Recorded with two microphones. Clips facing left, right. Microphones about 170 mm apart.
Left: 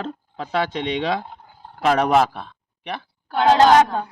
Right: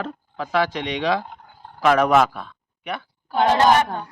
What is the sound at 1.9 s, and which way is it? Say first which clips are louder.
Speech: right 1 dB; 30° left (ahead or behind).